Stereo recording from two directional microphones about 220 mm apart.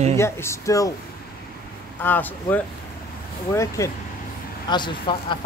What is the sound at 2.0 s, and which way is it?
Speech, 10° left (ahead or behind).